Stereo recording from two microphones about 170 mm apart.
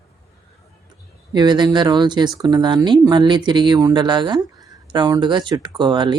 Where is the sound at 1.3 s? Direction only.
25° right (ahead or behind).